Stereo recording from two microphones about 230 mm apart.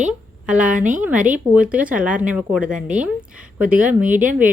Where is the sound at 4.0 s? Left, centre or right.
Right.